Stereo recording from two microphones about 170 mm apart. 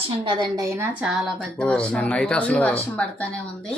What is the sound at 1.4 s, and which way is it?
Speech, 5° left (ahead or behind).